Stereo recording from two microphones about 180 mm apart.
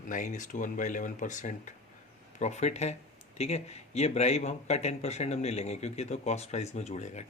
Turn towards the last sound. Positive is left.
turn(degrees=40)  # may be behind; listen again after turning